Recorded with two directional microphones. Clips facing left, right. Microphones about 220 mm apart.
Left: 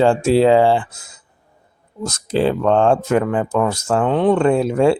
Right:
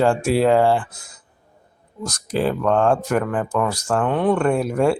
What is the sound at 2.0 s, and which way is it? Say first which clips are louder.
Speech: left 4 dB; 25° left (ahead or behind).